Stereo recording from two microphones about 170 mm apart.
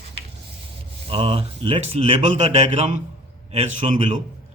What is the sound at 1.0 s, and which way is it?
Speech, 35° right (ahead or behind).